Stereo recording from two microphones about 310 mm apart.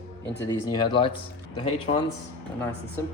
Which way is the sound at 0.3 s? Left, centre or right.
Centre.